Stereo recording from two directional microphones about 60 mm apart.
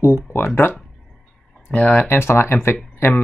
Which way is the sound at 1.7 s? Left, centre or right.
Left.